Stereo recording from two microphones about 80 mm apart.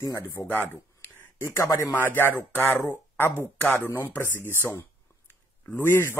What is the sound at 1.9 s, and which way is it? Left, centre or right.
Speech, left.